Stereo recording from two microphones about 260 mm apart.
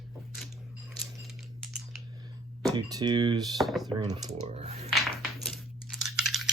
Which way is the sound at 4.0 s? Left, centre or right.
Centre.